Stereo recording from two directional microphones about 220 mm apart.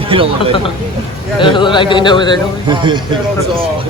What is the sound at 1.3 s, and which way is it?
Speech, 20° left (ahead or behind).